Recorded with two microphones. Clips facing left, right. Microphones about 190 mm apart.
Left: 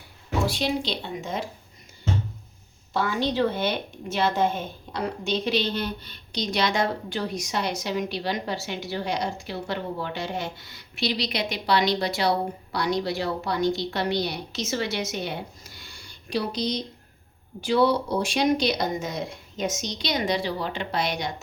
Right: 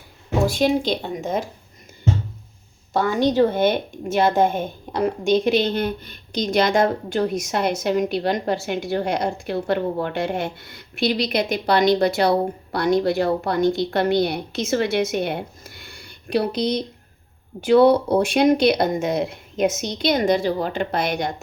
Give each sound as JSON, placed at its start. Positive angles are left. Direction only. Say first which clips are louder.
{"t": 0.4, "sound": "a woman's voice", "louder": "right 8 dB", "side_deg": -45}
{"t": 2.9, "sound": "a woman's voice", "louder": "right 6 dB", "side_deg": -45}